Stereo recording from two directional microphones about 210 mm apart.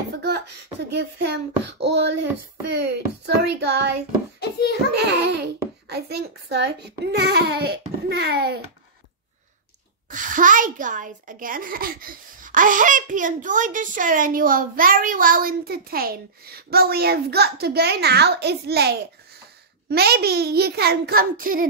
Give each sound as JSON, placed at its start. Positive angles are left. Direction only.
{"t": 0.8, "sound": "a child's voice", "side_deg": -55}
{"t": 4.4, "sound": "a sound", "side_deg": 50}
{"t": 4.9, "sound": "a child's voice", "side_deg": -50}
{"t": 10.0, "sound": "a child's voice", "side_deg": -40}